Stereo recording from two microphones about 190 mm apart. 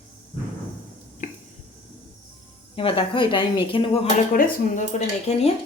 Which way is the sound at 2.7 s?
30° left (ahead or behind).